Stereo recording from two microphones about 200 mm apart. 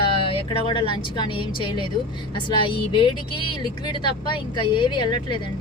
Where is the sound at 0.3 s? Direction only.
25° left (ahead or behind).